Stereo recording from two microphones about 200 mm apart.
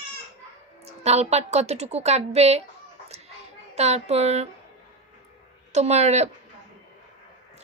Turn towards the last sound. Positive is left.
turn(degrees=-35)  # may be behind; listen again after turning